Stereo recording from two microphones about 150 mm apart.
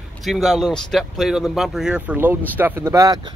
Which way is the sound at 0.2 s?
Centre (ahead or behind).